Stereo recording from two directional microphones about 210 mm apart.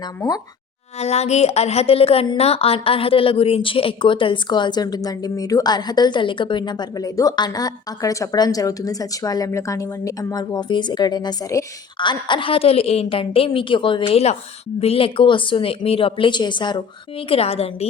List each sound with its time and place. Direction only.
0.0 s speech: 15° left (ahead or behind)
0.9 s a woman's voice: 30° left (ahead or behind)